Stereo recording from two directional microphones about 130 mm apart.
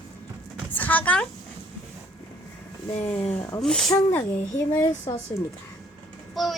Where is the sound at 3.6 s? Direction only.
5° left (ahead or behind).